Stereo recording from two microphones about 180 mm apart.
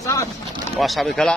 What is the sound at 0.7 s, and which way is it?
Speech, centre (ahead or behind).